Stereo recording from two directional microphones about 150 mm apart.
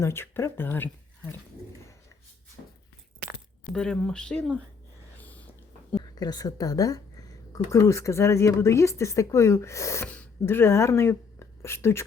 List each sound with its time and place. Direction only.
0.0 s speech: 15° left (ahead or behind)
3.7 s speech: 5° left (ahead or behind)
6.1 s speech: 25° left (ahead or behind)